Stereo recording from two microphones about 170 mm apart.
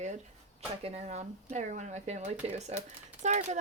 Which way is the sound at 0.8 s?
35° right (ahead or behind).